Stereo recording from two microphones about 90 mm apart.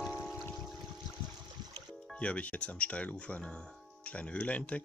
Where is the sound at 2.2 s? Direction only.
15° left (ahead or behind).